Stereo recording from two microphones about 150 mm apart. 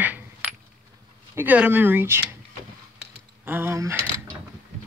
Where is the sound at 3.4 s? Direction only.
15° right (ahead or behind).